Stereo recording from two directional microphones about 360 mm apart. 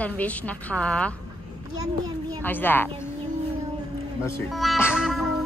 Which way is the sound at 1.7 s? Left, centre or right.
Centre.